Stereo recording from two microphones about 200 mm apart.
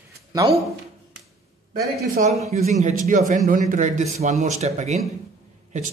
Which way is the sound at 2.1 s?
35° right (ahead or behind).